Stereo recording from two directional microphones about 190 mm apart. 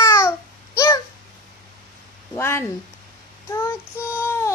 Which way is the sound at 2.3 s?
15° left (ahead or behind).